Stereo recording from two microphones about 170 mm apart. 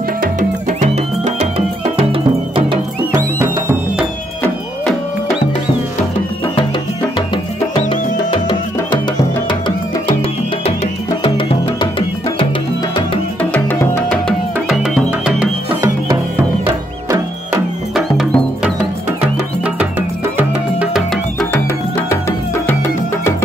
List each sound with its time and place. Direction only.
0.2 s music: 50° right (ahead or behind)
2.0 s music: 30° right (ahead or behind)
7.9 s music: 30° left (ahead or behind)
11.2 s music: 30° left (ahead or behind)
13.4 s music: 10° left (ahead or behind)
14.7 s music: 5° right (ahead or behind)
16.6 s music: 20° right (ahead or behind)
17.9 s music: 5° right (ahead or behind)
21.1 s music: 5° left (ahead or behind)